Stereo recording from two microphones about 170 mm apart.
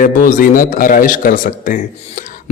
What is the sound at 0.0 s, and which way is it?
Speech, 50° left (ahead or behind).